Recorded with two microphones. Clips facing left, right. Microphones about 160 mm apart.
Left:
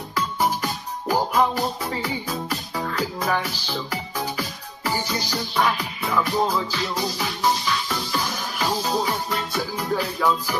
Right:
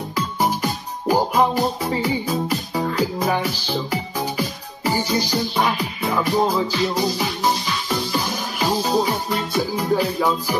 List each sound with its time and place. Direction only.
0.1 s music: 15° right (ahead or behind)